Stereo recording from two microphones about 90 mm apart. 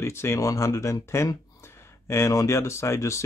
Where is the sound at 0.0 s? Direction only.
30° left (ahead or behind).